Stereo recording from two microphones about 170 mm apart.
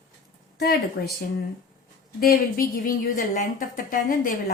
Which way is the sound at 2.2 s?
60° left (ahead or behind).